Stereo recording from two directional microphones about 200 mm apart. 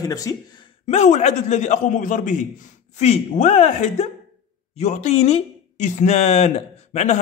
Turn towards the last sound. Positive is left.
turn(degrees=35)  # may be behind; listen again after turning